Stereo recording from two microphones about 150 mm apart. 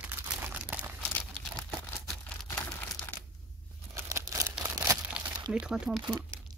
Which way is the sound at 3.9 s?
20° right (ahead or behind).